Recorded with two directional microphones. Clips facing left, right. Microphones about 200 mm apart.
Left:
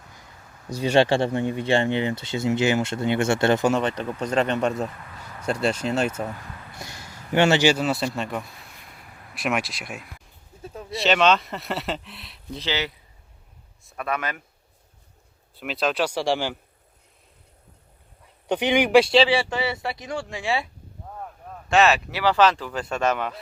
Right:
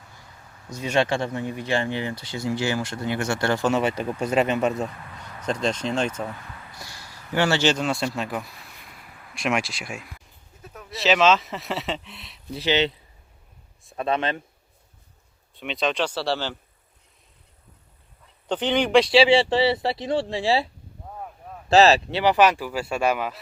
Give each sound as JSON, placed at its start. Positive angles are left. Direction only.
{"t": 0.7, "sound": "speech", "side_deg": 30}
{"t": 3.7, "sound": "speech", "side_deg": -5}
{"t": 6.7, "sound": "a sound", "side_deg": 20}
{"t": 7.6, "sound": "speech", "side_deg": 5}
{"t": 10.6, "sound": "a sound", "side_deg": 30}
{"t": 10.9, "sound": "speech", "side_deg": 0}
{"t": 12.6, "sound": "speech", "side_deg": -25}
{"t": 13.9, "sound": "speech", "side_deg": -25}
{"t": 15.5, "sound": "speech", "side_deg": 0}
{"t": 18.4, "sound": "speech", "side_deg": 10}
{"t": 19.3, "sound": "speech", "side_deg": -30}
{"t": 21.1, "sound": "a sound", "side_deg": -5}
{"t": 21.7, "sound": "speech", "side_deg": -35}
{"t": 22.3, "sound": "speech", "side_deg": -15}